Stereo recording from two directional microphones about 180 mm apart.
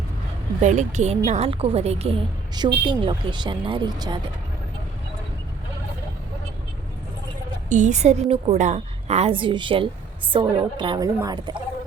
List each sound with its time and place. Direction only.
0.6 s a woman's voice: 40° right (ahead or behind); by 4.2 s 20° right (ahead or behind)
7.7 s a woman's voice: 40° right (ahead or behind); by 11.5 s 20° right (ahead or behind)